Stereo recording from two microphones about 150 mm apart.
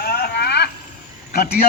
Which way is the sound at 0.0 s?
90° left.